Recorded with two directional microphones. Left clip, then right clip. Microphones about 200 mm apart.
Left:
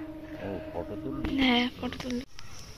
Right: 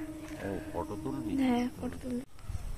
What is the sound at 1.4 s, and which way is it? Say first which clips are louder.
Speech: left 6 dB; 5° left (ahead or behind).